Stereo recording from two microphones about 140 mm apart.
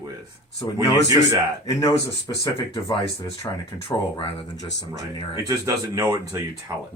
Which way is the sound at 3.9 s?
25° left (ahead or behind).